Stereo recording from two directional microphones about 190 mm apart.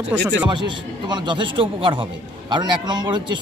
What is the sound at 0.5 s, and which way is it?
A man's voice, 25° right (ahead or behind).